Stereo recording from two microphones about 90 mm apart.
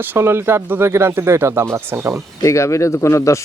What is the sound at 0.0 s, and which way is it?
Speech, 25° right (ahead or behind).